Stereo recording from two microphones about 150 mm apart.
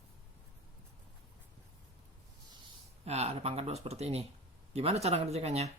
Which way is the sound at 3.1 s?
45° right (ahead or behind).